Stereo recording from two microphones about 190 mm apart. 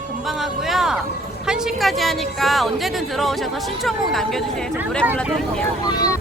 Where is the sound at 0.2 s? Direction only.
Centre (ahead or behind).